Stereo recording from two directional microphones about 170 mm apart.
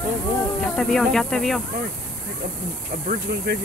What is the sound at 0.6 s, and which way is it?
Speech, 5° left (ahead or behind).